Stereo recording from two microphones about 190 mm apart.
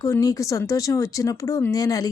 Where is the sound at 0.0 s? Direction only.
15° left (ahead or behind).